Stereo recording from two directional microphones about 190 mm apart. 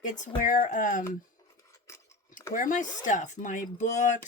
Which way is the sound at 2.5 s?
45° left (ahead or behind).